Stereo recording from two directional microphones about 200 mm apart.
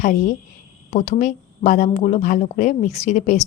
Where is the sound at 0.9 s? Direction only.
35° left (ahead or behind).